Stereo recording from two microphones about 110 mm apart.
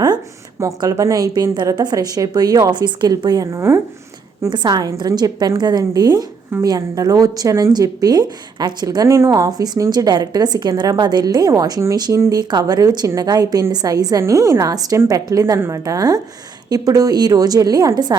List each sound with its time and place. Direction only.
0.6 s a woman's voice: 30° right (ahead or behind)
4.4 s a woman's voice: 45° right (ahead or behind)